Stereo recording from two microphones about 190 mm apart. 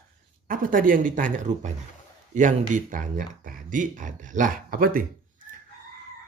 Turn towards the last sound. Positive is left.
turn(degrees=-50)  # may be behind; listen again after turning